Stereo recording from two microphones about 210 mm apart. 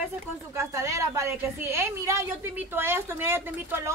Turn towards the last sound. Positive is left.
turn(degrees=-10)  # may be behind; listen again after turning